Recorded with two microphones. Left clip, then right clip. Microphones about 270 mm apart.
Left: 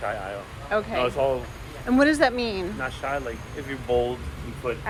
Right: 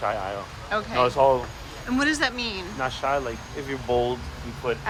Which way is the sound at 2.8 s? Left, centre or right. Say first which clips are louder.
Right 7 dB; right.